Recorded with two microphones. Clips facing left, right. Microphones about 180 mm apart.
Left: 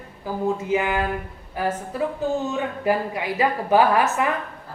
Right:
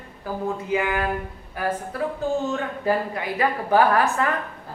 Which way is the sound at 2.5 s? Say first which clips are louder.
Left 1 dB; 15° left (ahead or behind).